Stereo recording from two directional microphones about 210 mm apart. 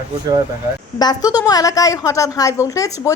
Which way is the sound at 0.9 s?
20° left (ahead or behind).